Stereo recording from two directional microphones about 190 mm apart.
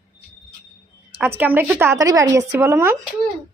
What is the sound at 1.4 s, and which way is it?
Speech, 10° right (ahead or behind).